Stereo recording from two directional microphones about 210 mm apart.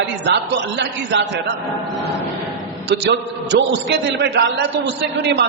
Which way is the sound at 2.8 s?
55° right (ahead or behind).